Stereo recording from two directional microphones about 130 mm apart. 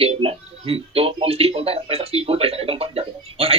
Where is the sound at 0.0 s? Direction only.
45° right (ahead or behind).